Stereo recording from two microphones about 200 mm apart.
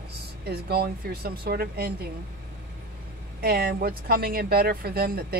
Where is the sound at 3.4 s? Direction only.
50° right (ahead or behind).